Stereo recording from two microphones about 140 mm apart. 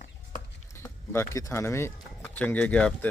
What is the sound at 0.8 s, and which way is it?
Speech, 20° left (ahead or behind).